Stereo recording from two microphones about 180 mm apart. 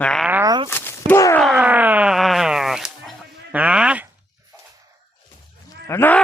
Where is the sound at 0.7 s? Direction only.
10° left (ahead or behind).